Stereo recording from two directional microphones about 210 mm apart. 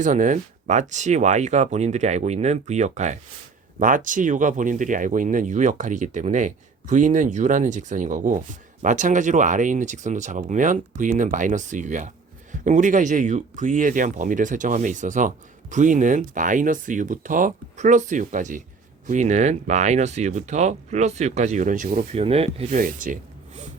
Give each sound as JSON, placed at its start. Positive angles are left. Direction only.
{"t": 0.0, "sound": "speech", "side_deg": -35}
{"t": 22.1, "sound": "speech", "side_deg": -30}
{"t": 22.8, "sound": "speech", "side_deg": -40}